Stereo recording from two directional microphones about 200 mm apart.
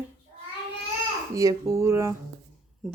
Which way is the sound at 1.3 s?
15° right (ahead or behind).